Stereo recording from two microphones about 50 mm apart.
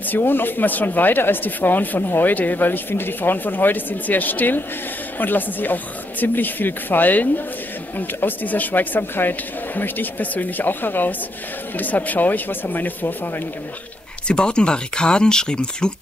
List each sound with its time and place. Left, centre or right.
0.2 s speech: left
14.2 s speech: centre